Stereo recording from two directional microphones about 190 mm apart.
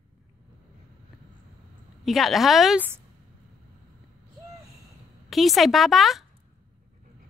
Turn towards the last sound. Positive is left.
turn(degrees=0)  # may be behind; listen again after turning